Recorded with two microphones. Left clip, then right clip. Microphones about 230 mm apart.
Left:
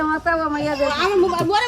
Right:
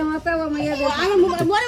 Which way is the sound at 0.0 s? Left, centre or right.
Left.